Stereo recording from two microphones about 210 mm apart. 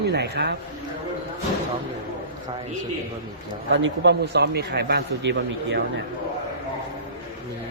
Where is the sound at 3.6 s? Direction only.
60° right (ahead or behind).